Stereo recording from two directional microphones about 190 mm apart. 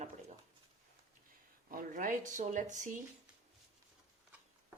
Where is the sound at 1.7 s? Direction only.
45° right (ahead or behind).